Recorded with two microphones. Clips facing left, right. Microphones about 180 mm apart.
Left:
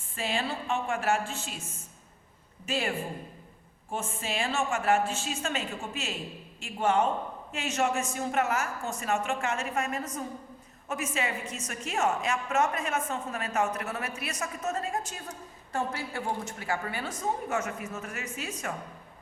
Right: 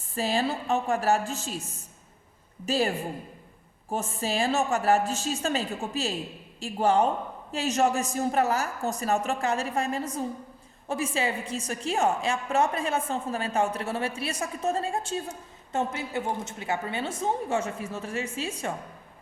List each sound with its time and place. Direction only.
0.1 s a woman's voice: 40° right (ahead or behind)